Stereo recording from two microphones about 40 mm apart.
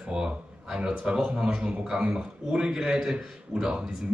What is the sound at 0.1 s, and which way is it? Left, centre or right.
A man's voice, centre.